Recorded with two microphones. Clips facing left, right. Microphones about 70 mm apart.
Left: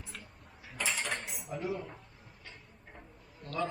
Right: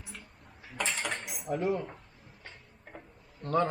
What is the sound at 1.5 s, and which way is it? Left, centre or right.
Speech, right.